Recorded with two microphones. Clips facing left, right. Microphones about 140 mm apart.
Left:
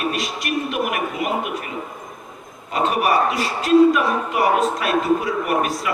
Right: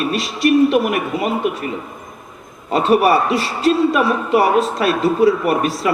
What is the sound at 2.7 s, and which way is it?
A man's voice, 30° right (ahead or behind).